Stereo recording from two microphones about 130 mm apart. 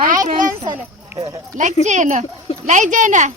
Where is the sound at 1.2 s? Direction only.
65° right (ahead or behind).